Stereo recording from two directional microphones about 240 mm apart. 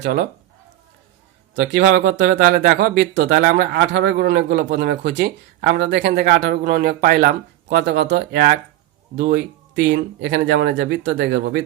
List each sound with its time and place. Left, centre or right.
0.0 s speech: right
1.7 s speech: right